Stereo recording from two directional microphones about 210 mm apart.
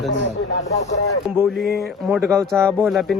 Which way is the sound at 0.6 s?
35° left (ahead or behind).